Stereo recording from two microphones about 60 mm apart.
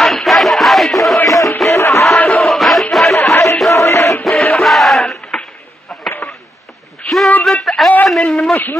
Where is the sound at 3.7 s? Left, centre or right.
Left.